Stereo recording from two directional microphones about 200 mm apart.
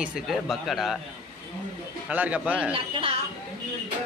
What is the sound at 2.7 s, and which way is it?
Speech, 25° right (ahead or behind).